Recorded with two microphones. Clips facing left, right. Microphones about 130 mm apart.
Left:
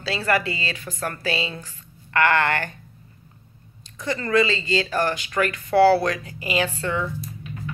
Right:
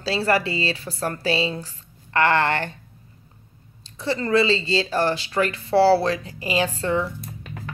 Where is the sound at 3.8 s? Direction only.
30° right (ahead or behind).